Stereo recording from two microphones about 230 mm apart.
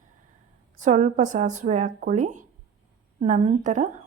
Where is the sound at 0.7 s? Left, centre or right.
Right.